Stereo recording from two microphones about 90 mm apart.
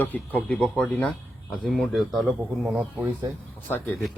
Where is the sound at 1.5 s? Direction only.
5° left (ahead or behind).